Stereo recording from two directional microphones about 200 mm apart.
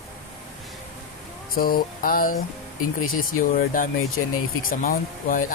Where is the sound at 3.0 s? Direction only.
90° left.